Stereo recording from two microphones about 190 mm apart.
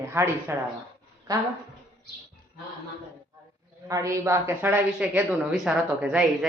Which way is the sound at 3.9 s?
15° right (ahead or behind).